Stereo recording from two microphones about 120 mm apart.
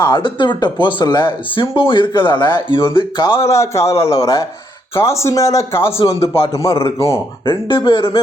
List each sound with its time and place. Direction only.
0.0 s speech: 40° left (ahead or behind)
3.3 s a man's voice: 25° left (ahead or behind)
6.0 s speech: 50° left (ahead or behind)